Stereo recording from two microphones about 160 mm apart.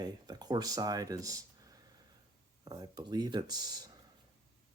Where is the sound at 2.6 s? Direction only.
25° right (ahead or behind).